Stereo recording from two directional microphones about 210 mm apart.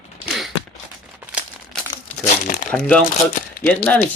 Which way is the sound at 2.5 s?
40° left (ahead or behind).